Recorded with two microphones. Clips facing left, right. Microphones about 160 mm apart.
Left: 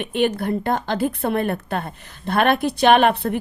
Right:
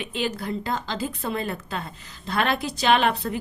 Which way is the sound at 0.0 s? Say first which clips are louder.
Left 7 dB; 55° left (ahead or behind).